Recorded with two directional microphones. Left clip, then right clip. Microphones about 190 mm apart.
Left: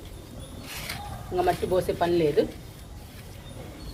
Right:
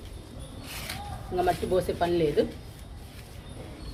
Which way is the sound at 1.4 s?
10° left (ahead or behind).